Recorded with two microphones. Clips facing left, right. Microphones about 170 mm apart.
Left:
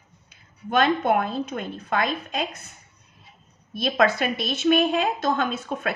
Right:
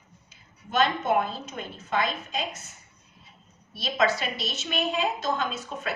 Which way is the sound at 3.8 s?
55° left (ahead or behind).